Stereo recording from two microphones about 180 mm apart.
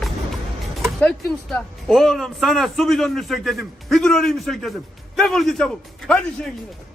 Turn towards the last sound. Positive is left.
turn(degrees=5)  # may be behind; listen again after turning